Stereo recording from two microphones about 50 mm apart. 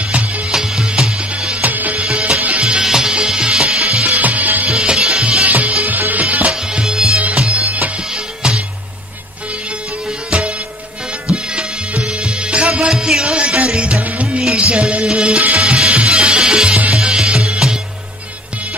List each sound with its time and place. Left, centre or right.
0.5 s music: centre
1.6 s music: right
2.8 s music: centre
3.8 s music: right
4.6 s music: centre
5.4 s music: right
6.5 s music: centre
7.2 s bagpipes: right
8.1 s music: centre
10.3 s music: right
12.0 s music: centre